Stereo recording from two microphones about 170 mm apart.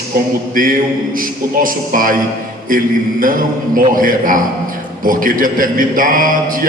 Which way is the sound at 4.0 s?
55° right (ahead or behind).